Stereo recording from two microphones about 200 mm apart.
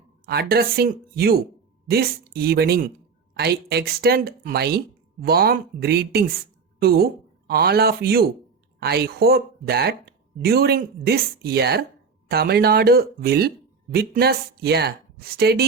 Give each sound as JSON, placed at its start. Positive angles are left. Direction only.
{"t": 0.3, "sound": "speech", "side_deg": -50}